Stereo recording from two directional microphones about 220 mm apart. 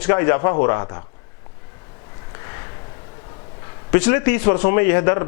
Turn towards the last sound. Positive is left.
turn(degrees=15)  # may be behind; listen again after turning